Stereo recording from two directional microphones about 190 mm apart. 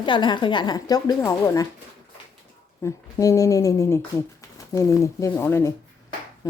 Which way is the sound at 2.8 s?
15° left (ahead or behind).